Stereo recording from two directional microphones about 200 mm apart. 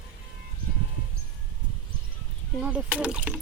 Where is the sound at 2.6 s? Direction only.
5° right (ahead or behind).